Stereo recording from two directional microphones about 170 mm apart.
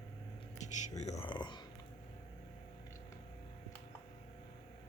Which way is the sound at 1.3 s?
25° left (ahead or behind).